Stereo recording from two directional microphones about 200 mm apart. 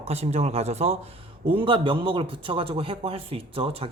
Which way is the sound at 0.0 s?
30° right (ahead or behind).